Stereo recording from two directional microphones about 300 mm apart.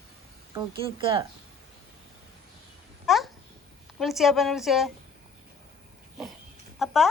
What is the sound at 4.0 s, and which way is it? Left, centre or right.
Speech, centre.